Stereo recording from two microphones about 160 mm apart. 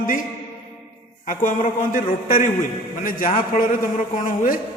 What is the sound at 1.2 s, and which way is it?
A man's voice, 55° left (ahead or behind).